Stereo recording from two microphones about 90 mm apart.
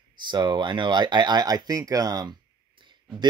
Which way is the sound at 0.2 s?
60° right (ahead or behind).